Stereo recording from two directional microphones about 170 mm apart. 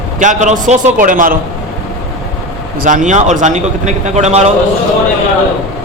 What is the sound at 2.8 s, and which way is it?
A man's voice, 45° right (ahead or behind).